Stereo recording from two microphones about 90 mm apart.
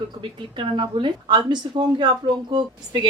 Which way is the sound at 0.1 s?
65° right (ahead or behind).